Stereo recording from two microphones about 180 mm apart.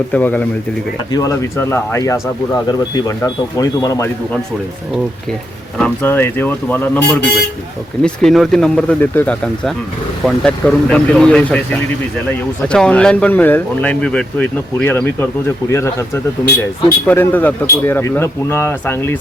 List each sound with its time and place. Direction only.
0.1 s speech: 10° left (ahead or behind)
5.7 s speech: 10° left (ahead or behind)